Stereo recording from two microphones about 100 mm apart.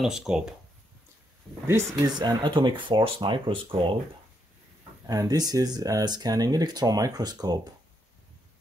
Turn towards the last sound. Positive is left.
turn(degrees=-40)  # may be behind; listen again after turning